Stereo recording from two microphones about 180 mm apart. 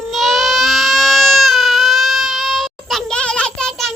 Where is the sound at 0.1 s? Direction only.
Centre (ahead or behind).